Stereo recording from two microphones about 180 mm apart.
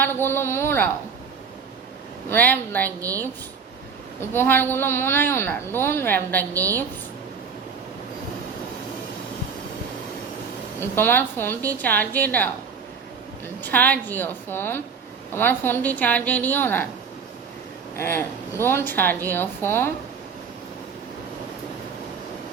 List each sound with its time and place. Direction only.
0.0 s a woman's voice: 10° left (ahead or behind)
2.3 s a woman's voice: 10° left (ahead or behind)
4.2 s a woman's voice: 10° left (ahead or behind)
6.5 s a woman's voice: 15° right (ahead or behind)
10.8 s a woman's voice: 10° left (ahead or behind)
13.6 s a woman's voice: 10° left (ahead or behind)
17.9 s a woman's voice: 15° left (ahead or behind)